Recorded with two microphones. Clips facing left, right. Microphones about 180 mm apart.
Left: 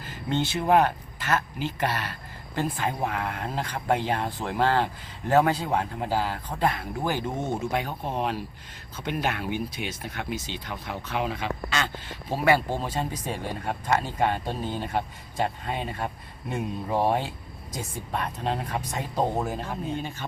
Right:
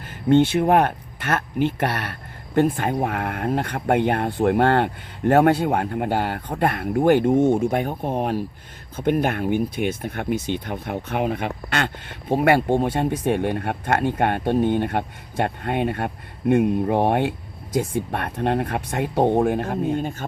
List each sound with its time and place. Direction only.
0.1 s speech: 55° right (ahead or behind)